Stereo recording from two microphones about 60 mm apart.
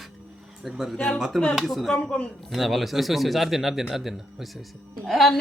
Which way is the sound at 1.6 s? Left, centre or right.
Centre.